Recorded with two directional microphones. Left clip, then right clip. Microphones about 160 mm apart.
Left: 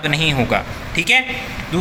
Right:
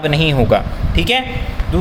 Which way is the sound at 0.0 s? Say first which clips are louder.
Right 2 dB; 35° right (ahead or behind).